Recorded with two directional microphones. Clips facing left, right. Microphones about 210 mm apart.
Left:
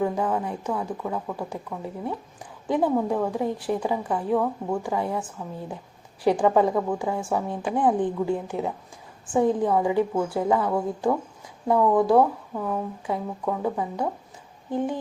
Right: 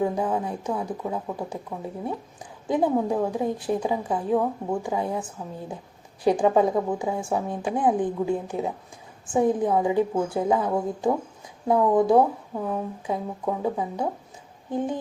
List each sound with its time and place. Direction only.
0.0 s a woman's voice: 15° right (ahead or behind)